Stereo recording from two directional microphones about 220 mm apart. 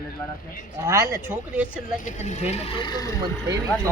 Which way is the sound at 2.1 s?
30° left (ahead or behind).